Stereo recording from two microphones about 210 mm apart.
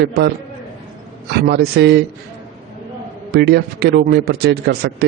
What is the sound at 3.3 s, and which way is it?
A man's voice, 50° right (ahead or behind).